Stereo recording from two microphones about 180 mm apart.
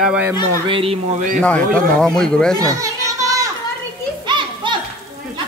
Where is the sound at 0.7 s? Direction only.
30° right (ahead or behind).